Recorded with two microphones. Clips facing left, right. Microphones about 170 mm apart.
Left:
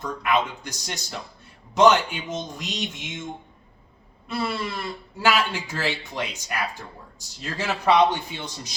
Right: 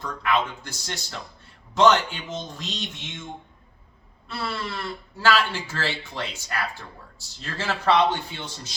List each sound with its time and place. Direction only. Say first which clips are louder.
0.0 s speech: left 1 dB; 20° left (ahead or behind)
4.3 s speech: left 3 dB; 15° left (ahead or behind)